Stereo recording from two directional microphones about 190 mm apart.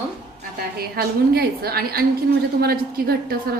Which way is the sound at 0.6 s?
55° right (ahead or behind).